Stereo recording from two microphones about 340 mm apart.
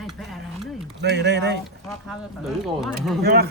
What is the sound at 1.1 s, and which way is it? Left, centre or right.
Speech, right.